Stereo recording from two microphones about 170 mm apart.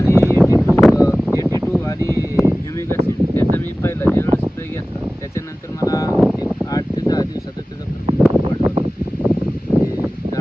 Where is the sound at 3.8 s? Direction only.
15° left (ahead or behind).